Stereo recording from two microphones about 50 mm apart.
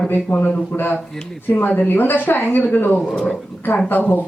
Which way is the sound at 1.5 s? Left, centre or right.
Left.